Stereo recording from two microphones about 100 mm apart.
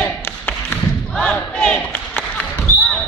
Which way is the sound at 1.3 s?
10° left (ahead or behind).